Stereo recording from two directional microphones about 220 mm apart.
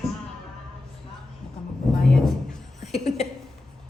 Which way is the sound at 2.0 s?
Centre (ahead or behind).